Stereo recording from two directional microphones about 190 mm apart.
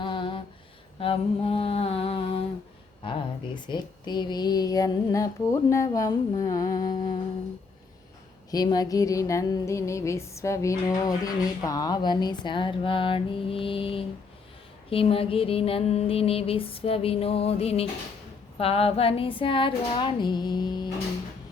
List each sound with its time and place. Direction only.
0.0 s a sound: 25° left (ahead or behind)
0.9 s mantra: 30° left (ahead or behind)
3.0 s music: 25° left (ahead or behind)
8.4 s music: 20° left (ahead or behind)
14.8 s mantra: 30° left (ahead or behind)
18.5 s music: 30° left (ahead or behind)